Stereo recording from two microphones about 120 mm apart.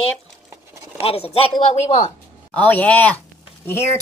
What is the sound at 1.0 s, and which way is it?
Speech, 55° left (ahead or behind).